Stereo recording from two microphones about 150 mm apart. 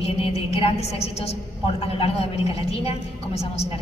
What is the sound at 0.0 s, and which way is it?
A woman's voice, 40° left (ahead or behind).